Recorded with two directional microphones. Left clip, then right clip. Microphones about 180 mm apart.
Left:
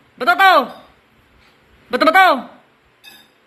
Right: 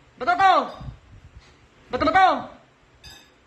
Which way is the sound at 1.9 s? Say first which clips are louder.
Left 6 dB; 25° left (ahead or behind).